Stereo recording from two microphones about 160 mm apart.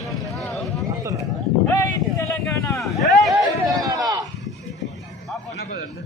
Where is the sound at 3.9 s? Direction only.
25° right (ahead or behind).